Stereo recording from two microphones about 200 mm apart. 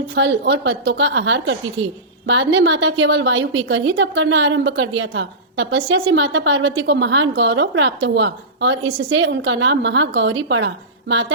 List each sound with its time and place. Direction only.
0.1 s a woman's voice: 65° right (ahead or behind)